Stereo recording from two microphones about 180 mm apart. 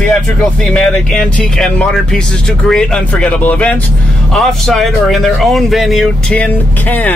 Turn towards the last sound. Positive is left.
turn(degrees=10)  # may be behind; listen again after turning